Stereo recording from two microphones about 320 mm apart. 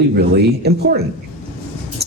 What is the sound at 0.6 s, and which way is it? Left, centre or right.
Speech, right.